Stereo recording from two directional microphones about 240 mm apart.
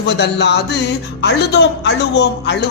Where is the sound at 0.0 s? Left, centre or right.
Left.